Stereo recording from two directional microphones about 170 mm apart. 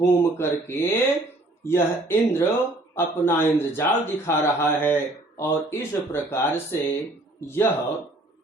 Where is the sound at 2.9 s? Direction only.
15° left (ahead or behind).